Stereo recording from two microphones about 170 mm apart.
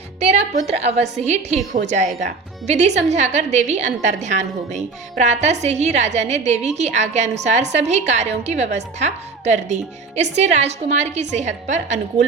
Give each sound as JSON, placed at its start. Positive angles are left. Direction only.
{"t": 0.2, "sound": "music", "side_deg": -40}
{"t": 0.7, "sound": "a woman's voice", "side_deg": -40}